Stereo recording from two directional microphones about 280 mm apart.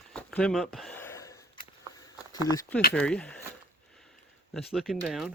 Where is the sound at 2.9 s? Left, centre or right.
Centre.